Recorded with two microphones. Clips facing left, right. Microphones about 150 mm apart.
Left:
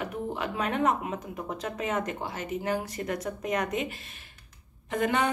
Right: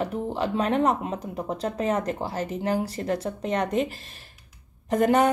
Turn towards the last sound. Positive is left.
turn(degrees=-40)  # may be behind; listen again after turning